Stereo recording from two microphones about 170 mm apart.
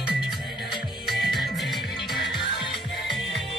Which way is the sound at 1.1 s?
Centre (ahead or behind).